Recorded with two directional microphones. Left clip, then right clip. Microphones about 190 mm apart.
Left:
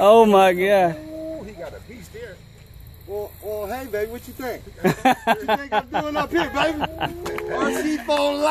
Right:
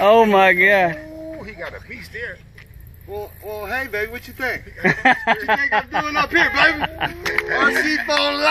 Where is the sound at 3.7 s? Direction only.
40° left (ahead or behind).